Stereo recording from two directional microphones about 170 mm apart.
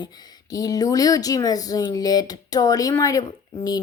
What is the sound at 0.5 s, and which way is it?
Speech, 20° left (ahead or behind).